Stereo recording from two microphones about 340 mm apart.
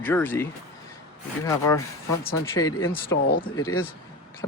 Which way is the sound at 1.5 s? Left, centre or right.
Centre.